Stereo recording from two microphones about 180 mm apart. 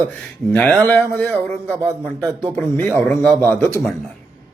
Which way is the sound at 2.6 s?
10° left (ahead or behind).